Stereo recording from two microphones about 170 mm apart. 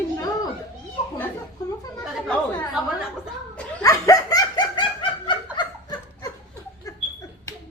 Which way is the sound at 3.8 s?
20° left (ahead or behind).